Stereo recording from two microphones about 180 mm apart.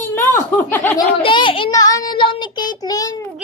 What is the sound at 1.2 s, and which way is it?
Speech, 25° left (ahead or behind).